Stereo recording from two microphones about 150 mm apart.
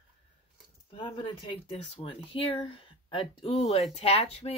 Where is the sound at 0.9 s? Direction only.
35° left (ahead or behind).